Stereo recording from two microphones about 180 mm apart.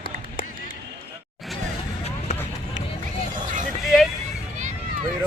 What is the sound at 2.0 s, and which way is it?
Vehicle, 40° left (ahead or behind).